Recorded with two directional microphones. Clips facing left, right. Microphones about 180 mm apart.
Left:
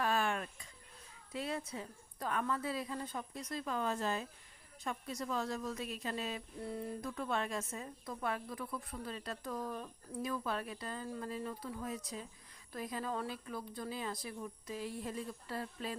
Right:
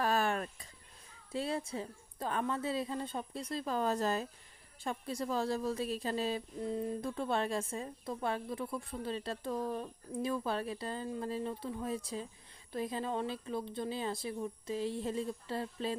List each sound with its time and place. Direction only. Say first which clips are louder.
0.0 s a sound: right 3 dB; 40° right (ahead or behind)
1.3 s a woman's voice: right 4 dB; 30° right (ahead or behind)
6.6 s a woman's voice: right 3 dB; 20° right (ahead or behind)